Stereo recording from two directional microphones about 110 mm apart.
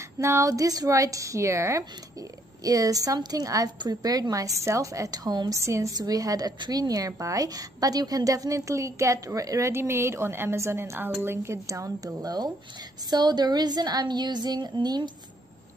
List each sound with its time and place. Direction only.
0.2 s a woman's voice: 25° right (ahead or behind)